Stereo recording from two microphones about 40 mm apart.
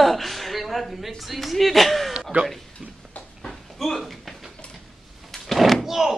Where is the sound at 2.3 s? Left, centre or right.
Right.